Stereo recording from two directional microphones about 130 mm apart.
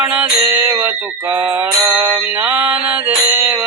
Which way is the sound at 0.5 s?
15° right (ahead or behind).